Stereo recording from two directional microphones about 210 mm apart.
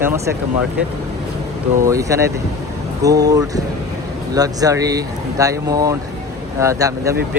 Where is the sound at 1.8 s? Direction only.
15° right (ahead or behind).